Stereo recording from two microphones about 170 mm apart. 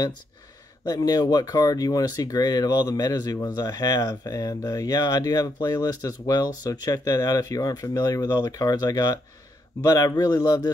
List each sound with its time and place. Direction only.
0.8 s speech: 20° left (ahead or behind)